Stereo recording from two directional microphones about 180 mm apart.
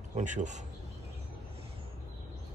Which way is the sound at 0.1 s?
45° right (ahead or behind).